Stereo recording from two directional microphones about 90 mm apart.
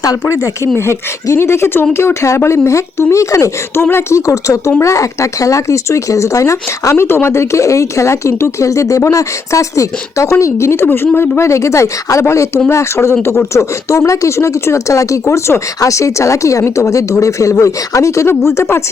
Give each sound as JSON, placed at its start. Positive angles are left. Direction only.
{"t": 0.0, "sound": "speech", "side_deg": 35}